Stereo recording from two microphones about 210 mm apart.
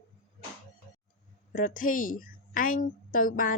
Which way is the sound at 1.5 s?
40° left (ahead or behind).